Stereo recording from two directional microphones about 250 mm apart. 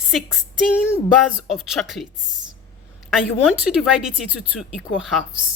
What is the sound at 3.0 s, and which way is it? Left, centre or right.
Speech, centre.